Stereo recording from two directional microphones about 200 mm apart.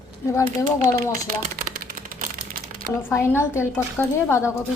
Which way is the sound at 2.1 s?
45° right (ahead or behind).